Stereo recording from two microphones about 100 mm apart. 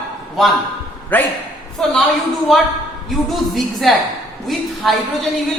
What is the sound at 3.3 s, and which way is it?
A man's voice, centre (ahead or behind).